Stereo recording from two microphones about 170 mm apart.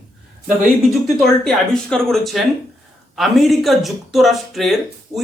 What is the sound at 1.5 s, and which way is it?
Speech, 5° left (ahead or behind).